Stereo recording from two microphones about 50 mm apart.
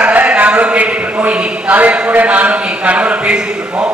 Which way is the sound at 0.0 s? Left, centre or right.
Right.